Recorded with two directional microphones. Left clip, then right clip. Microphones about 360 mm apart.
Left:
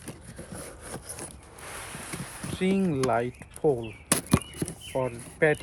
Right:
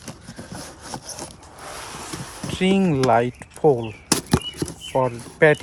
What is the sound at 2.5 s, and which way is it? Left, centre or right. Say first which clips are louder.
Speech: right 7 dB; right.